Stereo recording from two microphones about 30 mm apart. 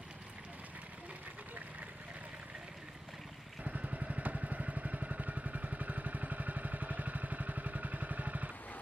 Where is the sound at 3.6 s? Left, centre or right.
Right.